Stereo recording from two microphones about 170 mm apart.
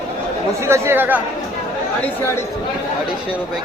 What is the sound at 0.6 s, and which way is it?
Speech, 15° right (ahead or behind).